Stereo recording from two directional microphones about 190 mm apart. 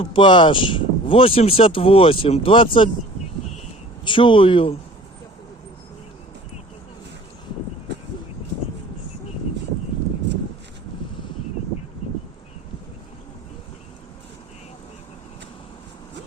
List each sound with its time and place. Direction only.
0.0 s speech: 25° left (ahead or behind)
4.0 s speech: 25° left (ahead or behind)